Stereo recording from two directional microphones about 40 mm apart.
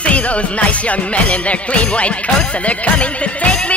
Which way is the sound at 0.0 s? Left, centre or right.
Left.